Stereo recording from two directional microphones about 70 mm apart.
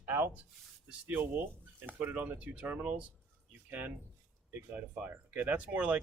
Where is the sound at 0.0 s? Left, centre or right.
Right.